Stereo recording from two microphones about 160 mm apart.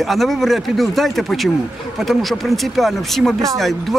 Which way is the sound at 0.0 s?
Centre (ahead or behind).